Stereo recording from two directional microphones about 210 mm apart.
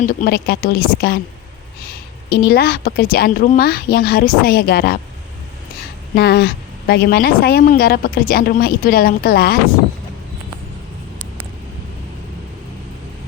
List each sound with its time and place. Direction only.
0.0 s a woman's voice: 40° left (ahead or behind)
2.3 s a woman's voice: 50° left (ahead or behind)
6.1 s a woman's voice: 50° left (ahead or behind)